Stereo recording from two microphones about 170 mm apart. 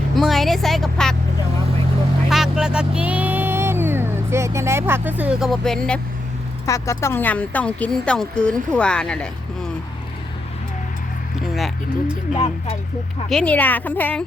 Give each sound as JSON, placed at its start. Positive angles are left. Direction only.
{"t": 0.2, "sound": "a woman's voice", "side_deg": 0}
{"t": 2.3, "sound": "speech", "side_deg": -5}
{"t": 6.7, "sound": "speech", "side_deg": 20}
{"t": 11.5, "sound": "speech", "side_deg": 0}
{"t": 12.3, "sound": "speech", "side_deg": 35}
{"t": 13.2, "sound": "speech", "side_deg": 5}